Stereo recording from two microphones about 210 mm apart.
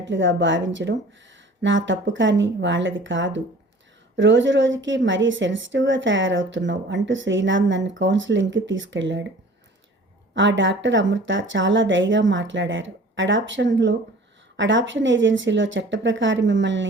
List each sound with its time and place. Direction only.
0.1 s a woman's voice: 60° right (ahead or behind)
10.3 s a woman's voice: 60° right (ahead or behind)